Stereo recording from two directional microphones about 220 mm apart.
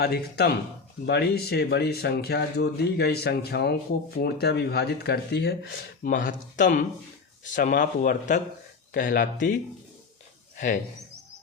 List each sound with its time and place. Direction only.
0.0 s speech: 45° left (ahead or behind)